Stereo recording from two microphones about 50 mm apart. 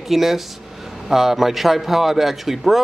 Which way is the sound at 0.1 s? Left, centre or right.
Centre.